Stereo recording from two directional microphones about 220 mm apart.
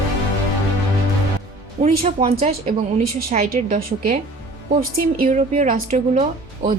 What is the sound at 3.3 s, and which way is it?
Speech, 40° right (ahead or behind).